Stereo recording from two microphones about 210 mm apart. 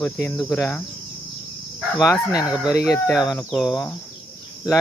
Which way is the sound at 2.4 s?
5° right (ahead or behind).